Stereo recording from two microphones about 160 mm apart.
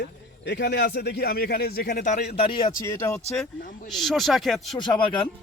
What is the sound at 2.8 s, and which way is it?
Speech, 15° left (ahead or behind).